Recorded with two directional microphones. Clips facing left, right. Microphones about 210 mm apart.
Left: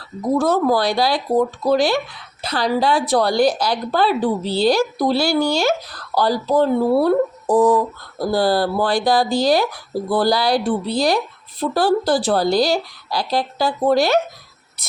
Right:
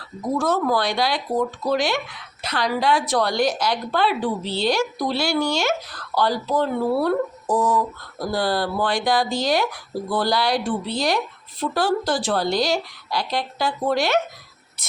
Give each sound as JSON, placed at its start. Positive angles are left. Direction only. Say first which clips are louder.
{"t": 0.3, "sound": "speech", "louder": "left 4 dB", "side_deg": 35}
{"t": 8.3, "sound": "speech", "louder": "left 5 dB", "side_deg": 35}
{"t": 14.8, "sound": "a sound", "louder": "left 3 dB", "side_deg": 35}